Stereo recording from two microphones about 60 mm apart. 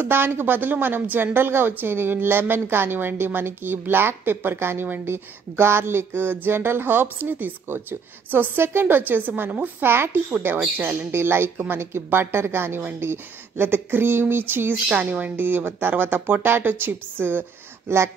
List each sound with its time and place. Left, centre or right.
0.0 s speech: right
9.8 s speech: right
11.5 s speech: right
11.8 s speech: right